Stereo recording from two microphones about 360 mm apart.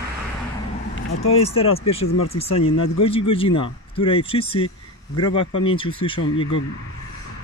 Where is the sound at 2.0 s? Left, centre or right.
Left.